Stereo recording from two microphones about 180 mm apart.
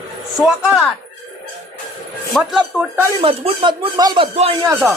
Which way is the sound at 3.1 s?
30° right (ahead or behind).